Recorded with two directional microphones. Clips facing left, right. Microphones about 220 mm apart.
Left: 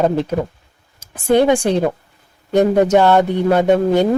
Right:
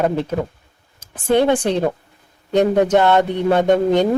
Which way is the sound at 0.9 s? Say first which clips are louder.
Left 2 dB; 10° left (ahead or behind).